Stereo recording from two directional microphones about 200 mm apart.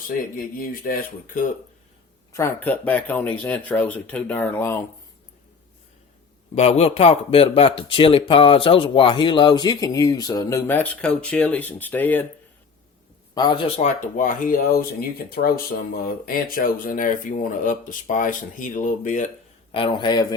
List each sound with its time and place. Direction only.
0.3 s speech: 45° left (ahead or behind)
2.3 s speech: 10° left (ahead or behind)
6.5 s speech: 30° left (ahead or behind); by 12.2 s 10° left (ahead or behind)
13.3 s speech: 25° left (ahead or behind); by 19.3 s 40° left (ahead or behind)
19.7 s speech: 25° left (ahead or behind)